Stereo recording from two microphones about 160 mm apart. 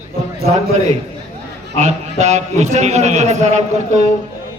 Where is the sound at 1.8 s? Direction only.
45° right (ahead or behind).